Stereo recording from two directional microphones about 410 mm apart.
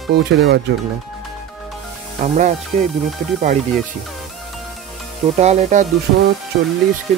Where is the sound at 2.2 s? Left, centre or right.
Centre.